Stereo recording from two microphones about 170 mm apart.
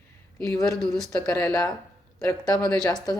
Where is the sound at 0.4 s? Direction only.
20° left (ahead or behind).